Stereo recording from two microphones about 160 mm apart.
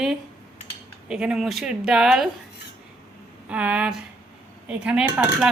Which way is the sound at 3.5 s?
10° right (ahead or behind).